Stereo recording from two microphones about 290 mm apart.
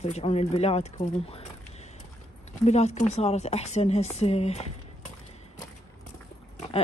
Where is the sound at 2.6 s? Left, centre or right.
Left.